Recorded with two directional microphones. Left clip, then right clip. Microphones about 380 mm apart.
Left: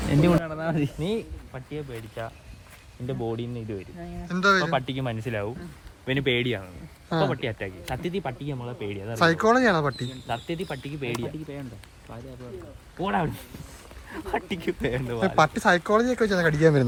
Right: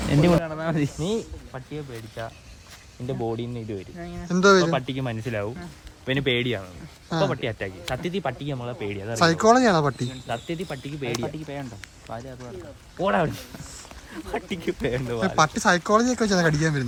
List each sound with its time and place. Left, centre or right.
0.1 s speech: centre
11.2 s speech: centre
13.0 s speech: centre